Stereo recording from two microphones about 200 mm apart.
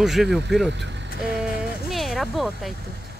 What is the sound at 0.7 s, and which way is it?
Speech, 60° right (ahead or behind).